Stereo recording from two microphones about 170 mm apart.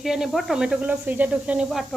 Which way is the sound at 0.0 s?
Centre (ahead or behind).